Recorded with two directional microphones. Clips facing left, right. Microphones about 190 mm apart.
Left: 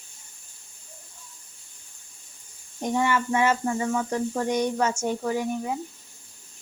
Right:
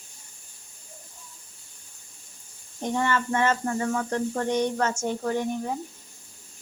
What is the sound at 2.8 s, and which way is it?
Speech, 10° left (ahead or behind).